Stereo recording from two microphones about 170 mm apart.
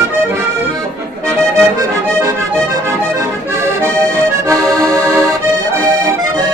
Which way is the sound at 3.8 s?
20° right (ahead or behind).